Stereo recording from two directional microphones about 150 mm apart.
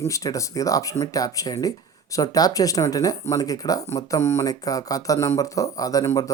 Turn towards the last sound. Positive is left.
turn(degrees=20)  # may be behind; listen again after turning